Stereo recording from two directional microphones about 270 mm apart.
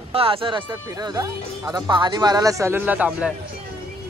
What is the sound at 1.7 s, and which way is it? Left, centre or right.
A man's voice, centre.